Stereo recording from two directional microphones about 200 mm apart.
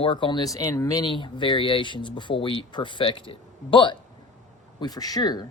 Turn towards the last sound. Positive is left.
turn(degrees=20)  # may be behind; listen again after turning